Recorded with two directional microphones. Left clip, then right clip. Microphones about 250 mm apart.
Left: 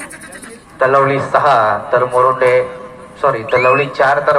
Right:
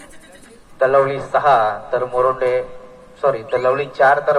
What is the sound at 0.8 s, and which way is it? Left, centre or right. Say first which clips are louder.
A man's voice: left 3 dB; right.